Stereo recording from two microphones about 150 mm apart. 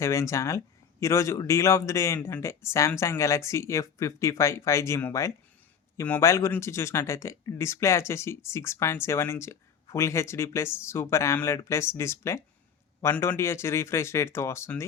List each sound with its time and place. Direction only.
0.0 s speech: 20° left (ahead or behind)